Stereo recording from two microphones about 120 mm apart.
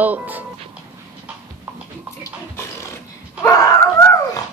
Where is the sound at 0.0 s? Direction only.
15° right (ahead or behind).